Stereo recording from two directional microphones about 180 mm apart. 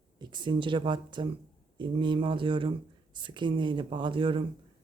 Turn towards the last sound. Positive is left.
turn(degrees=-30)  # may be behind; listen again after turning